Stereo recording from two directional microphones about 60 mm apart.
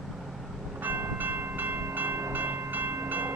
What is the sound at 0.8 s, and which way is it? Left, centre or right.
Train, right.